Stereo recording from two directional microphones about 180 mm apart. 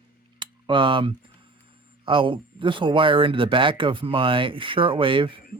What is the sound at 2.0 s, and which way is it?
Speech, 30° right (ahead or behind).